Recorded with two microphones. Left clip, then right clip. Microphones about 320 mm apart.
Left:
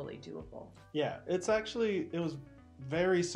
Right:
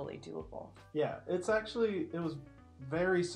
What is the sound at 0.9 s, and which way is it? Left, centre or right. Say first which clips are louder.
Speech: left 1 dB; left.